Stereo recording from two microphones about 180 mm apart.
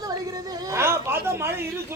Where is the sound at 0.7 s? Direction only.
15° right (ahead or behind).